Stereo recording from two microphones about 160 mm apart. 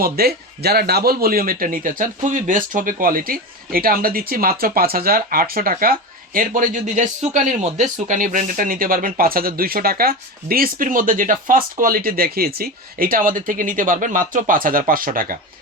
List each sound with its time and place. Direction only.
0.0 s speech: 75° right (ahead or behind)